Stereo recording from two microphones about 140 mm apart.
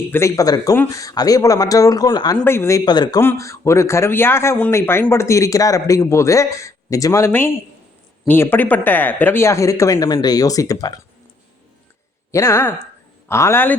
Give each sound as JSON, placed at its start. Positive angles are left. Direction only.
{"t": 0.1, "sound": "speech", "side_deg": 20}
{"t": 2.4, "sound": "speech", "side_deg": 15}
{"t": 3.2, "sound": "speech", "side_deg": 20}
{"t": 12.3, "sound": "speech", "side_deg": 20}